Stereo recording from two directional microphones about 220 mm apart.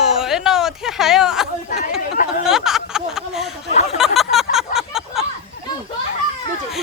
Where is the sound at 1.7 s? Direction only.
35° left (ahead or behind).